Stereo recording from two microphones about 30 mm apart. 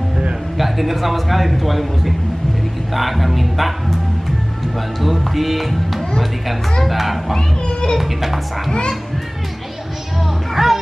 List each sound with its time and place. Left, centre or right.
0.6 s speech: centre
5.0 s speech: centre
7.3 s speech: left
8.0 s speech: centre
10.5 s music: centre